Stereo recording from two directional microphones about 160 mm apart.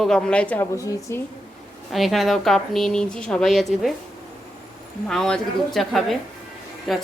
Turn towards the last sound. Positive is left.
turn(degrees=0)  # may be behind; listen again after turning